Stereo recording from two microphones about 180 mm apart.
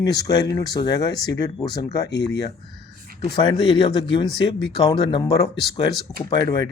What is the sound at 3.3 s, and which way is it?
Speech, 25° left (ahead or behind).